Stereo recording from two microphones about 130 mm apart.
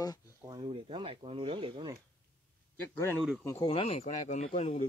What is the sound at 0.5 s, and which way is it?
Speech, 40° right (ahead or behind).